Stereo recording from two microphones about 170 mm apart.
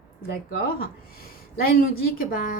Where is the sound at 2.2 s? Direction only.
60° left (ahead or behind).